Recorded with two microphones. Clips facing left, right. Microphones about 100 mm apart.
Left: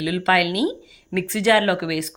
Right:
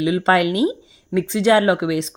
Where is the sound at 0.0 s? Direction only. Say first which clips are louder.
Right 3 dB; 30° right (ahead or behind).